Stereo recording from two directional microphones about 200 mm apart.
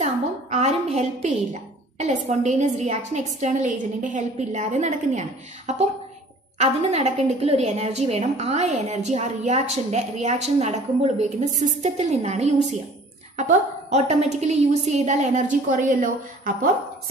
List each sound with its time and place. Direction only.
0.0 s a woman's voice: 35° right (ahead or behind)